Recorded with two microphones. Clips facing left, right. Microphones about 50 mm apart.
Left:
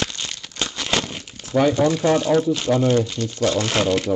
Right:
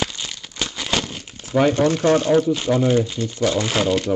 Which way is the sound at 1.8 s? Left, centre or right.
Right.